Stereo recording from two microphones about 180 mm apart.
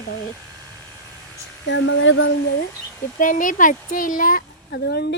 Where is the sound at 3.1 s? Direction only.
45° left (ahead or behind).